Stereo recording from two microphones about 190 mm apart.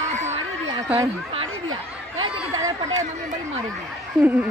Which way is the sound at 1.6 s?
90° right.